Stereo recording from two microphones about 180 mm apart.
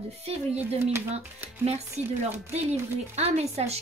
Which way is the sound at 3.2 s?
35° right (ahead or behind).